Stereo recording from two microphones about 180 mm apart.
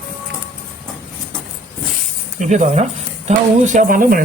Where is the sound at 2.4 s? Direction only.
40° right (ahead or behind).